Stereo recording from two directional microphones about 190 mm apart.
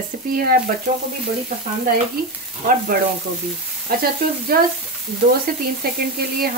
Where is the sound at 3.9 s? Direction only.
55° right (ahead or behind).